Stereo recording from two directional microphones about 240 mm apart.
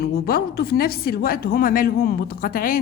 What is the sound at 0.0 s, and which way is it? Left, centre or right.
Speech, left.